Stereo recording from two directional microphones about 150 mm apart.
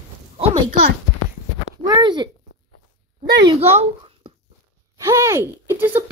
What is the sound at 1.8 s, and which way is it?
Speech, 30° right (ahead or behind).